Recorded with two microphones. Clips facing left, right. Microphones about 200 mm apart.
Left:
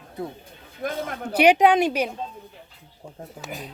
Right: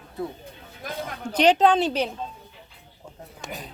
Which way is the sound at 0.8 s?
60° left (ahead or behind).